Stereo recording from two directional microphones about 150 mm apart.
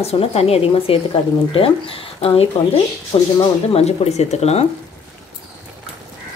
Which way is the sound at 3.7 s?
45° left (ahead or behind).